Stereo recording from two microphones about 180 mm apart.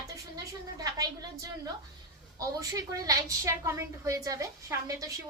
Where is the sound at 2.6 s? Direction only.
20° right (ahead or behind).